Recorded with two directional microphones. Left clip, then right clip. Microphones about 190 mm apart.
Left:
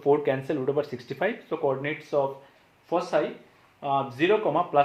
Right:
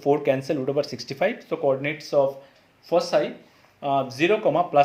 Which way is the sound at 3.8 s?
35° right (ahead or behind).